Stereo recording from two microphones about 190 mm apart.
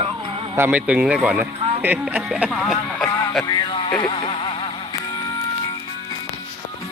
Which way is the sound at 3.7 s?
25° left (ahead or behind).